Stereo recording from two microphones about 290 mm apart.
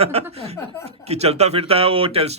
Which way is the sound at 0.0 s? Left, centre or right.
Right.